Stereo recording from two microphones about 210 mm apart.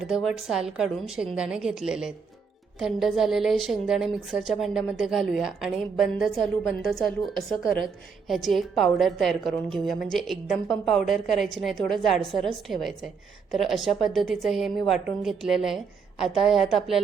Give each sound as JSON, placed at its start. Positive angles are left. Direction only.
{"t": 0.0, "sound": "a woman's voice", "side_deg": 0}